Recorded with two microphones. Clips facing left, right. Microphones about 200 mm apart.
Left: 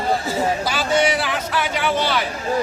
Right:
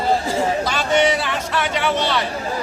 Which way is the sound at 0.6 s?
5° left (ahead or behind).